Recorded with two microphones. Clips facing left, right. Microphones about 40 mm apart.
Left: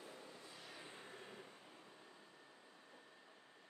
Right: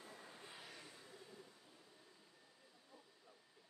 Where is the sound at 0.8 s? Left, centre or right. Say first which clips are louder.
Left 4 dB; left.